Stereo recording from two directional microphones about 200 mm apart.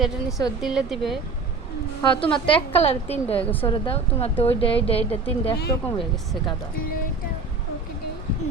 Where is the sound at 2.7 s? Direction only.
30° left (ahead or behind).